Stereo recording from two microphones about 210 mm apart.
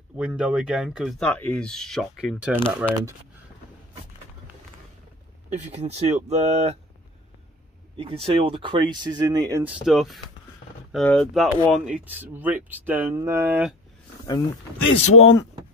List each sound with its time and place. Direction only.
0.2 s speech: 5° right (ahead or behind)
5.5 s speech: 30° right (ahead or behind)
8.0 s speech: 25° right (ahead or behind)
9.6 s speech: centre (ahead or behind)
14.9 s speech: 30° left (ahead or behind)